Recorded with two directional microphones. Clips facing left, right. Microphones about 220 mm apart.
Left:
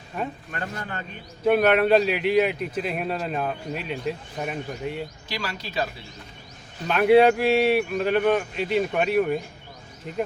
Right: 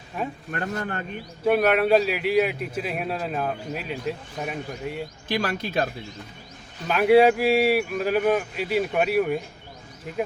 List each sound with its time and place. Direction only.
0.5 s speech: 50° right (ahead or behind)
1.5 s a man's voice: centre (ahead or behind)
5.3 s speech: 50° right (ahead or behind)
6.8 s a man's voice: 5° right (ahead or behind)